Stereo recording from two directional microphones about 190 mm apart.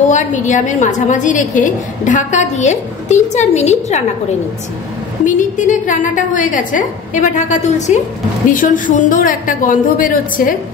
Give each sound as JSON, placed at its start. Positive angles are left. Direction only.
{"t": 0.1, "sound": "a woman's voice", "side_deg": 40}
{"t": 5.2, "sound": "a woman's voice", "side_deg": 40}